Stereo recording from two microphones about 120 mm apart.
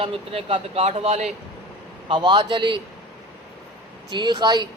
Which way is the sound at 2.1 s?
45° right (ahead or behind).